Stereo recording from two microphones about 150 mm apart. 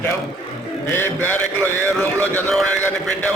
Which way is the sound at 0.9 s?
15° left (ahead or behind).